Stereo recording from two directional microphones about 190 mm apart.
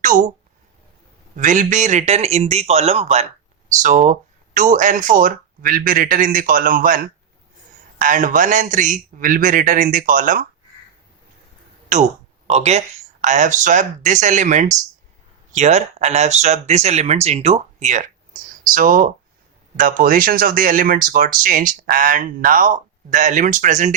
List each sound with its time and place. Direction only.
0.0 s speech: 45° right (ahead or behind)
1.4 s speech: 45° right (ahead or behind)
12.5 s speech: 35° right (ahead or behind)